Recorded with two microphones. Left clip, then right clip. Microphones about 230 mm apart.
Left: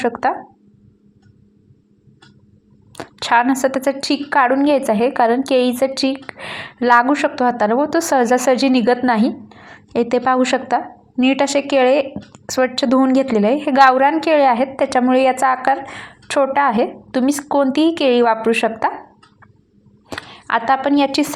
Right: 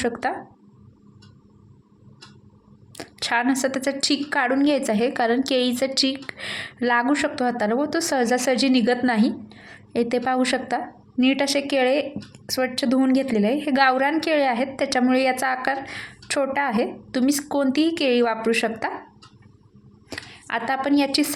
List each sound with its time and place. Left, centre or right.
0.0 s a woman's voice: centre
2.9 s a woman's voice: centre
20.1 s a woman's voice: centre